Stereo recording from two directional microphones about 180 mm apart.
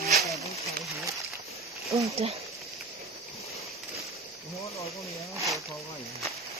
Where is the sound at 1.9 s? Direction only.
25° right (ahead or behind).